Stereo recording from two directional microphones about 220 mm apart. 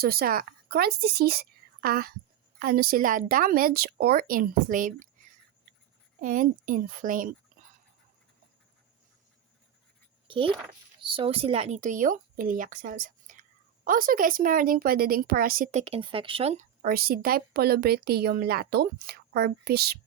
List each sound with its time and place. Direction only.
0.0 s a woman's voice: 45° right (ahead or behind)
6.1 s a woman's voice: 40° right (ahead or behind)
10.2 s a woman's voice: 25° right (ahead or behind)
16.8 s a woman's voice: 45° right (ahead or behind)